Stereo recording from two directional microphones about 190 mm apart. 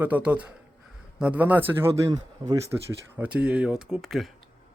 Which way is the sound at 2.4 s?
30° right (ahead or behind).